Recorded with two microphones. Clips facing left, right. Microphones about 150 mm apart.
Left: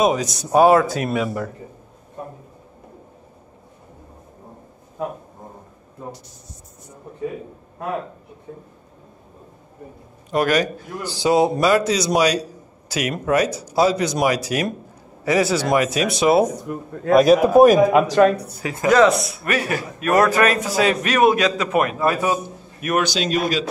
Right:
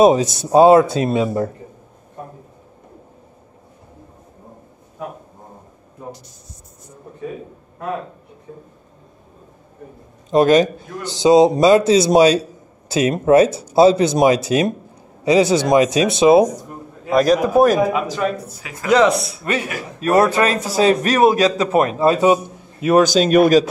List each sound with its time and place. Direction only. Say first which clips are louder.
0.0 s a man's voice: right 6 dB; 25° right (ahead or behind)
10.3 s a man's voice: right 6 dB; 25° right (ahead or behind)
17.1 s a man's voice: left 2 dB; 5° left (ahead or behind)
17.9 s speech: left 6 dB; 70° left (ahead or behind)
18.9 s a man's voice: even; 25° right (ahead or behind)
22.9 s speech: right 9 dB; 45° right (ahead or behind)